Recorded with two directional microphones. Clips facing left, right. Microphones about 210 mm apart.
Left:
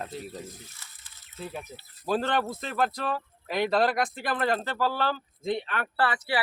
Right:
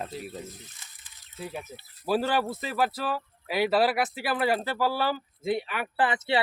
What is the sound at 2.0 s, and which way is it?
Speech, 5° right (ahead or behind).